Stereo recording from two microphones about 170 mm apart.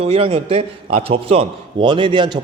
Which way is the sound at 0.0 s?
35° right (ahead or behind).